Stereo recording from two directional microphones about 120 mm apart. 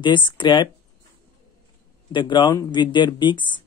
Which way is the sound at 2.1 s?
40° left (ahead or behind).